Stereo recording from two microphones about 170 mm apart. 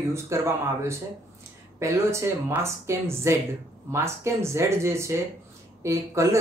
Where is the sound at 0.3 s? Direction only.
15° right (ahead or behind).